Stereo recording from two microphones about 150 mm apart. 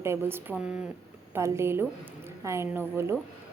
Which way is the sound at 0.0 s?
15° right (ahead or behind).